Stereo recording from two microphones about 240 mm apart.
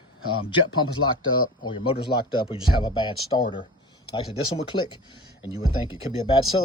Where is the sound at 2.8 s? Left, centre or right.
Centre.